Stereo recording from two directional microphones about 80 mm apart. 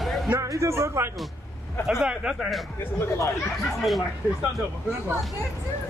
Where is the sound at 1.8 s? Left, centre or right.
Centre.